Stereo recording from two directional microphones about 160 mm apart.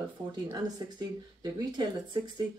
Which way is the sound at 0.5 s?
25° right (ahead or behind).